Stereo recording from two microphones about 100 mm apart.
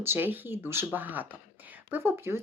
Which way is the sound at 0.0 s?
20° right (ahead or behind).